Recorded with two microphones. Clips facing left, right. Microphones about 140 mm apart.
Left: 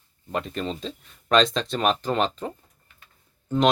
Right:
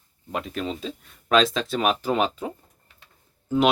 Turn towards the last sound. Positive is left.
turn(degrees=-5)  # may be behind; listen again after turning